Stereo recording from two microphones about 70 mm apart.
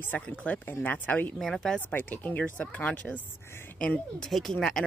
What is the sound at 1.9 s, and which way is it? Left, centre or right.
Speech, left.